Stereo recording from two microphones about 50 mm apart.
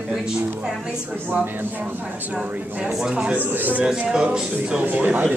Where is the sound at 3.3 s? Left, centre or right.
Right.